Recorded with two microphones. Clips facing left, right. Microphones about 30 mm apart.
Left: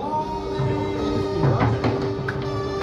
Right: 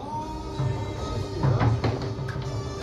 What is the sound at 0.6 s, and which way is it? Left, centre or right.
Music, left.